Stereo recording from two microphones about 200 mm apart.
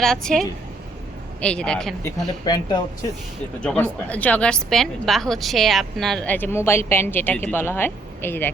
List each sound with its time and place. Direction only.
0.0 s speech: centre (ahead or behind)
2.4 s speech: 20° left (ahead or behind)
3.6 s a woman's voice: 5° left (ahead or behind)